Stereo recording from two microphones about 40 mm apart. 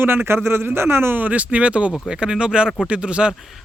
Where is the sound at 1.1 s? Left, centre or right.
Right.